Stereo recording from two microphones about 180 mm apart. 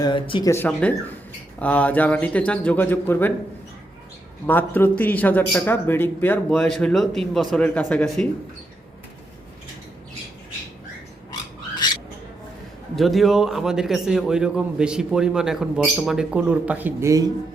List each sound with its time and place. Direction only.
0.0 s speech: 25° left (ahead or behind)
0.5 s a man's voice: 10° left (ahead or behind)
4.4 s a man's voice: 10° left (ahead or behind)
13.0 s a man's voice: centre (ahead or behind); by 17.2 s 15° right (ahead or behind)